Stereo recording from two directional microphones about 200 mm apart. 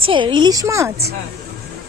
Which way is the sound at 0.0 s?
25° right (ahead or behind).